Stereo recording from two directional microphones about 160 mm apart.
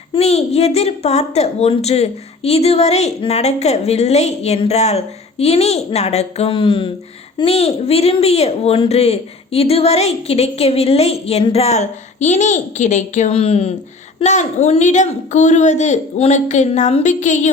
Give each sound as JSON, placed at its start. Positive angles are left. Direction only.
{"t": 0.1, "sound": "a woman's voice", "side_deg": 40}